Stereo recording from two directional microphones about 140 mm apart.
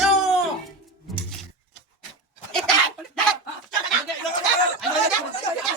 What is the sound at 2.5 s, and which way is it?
Chicken, 5° left (ahead or behind).